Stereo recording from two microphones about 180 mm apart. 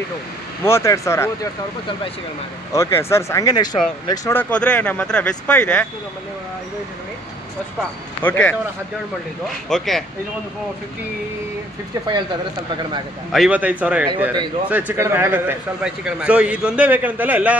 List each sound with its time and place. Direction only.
0.7 s speech: 15° left (ahead or behind)
2.7 s speech: 15° left (ahead or behind)
8.2 s speech: 10° left (ahead or behind)
9.7 s speech: centre (ahead or behind)
13.3 s speech: 5° right (ahead or behind)